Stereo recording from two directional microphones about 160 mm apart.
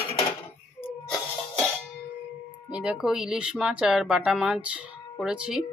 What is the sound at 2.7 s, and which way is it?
Speech, 5° right (ahead or behind).